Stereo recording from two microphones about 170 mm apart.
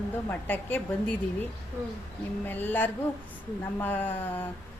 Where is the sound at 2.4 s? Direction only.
10° left (ahead or behind).